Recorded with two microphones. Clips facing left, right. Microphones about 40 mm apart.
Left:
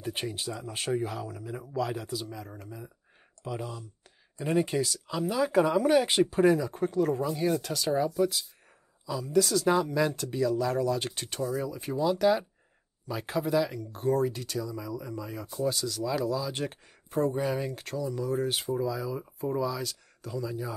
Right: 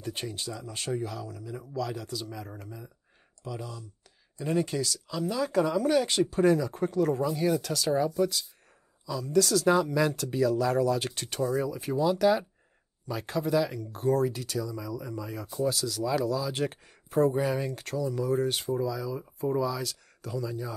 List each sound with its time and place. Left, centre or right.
0.0 s speech: centre
2.3 s speech: centre
3.4 s speech: left
6.5 s speech: centre